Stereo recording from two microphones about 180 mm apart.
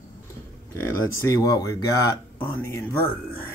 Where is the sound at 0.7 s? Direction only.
15° left (ahead or behind).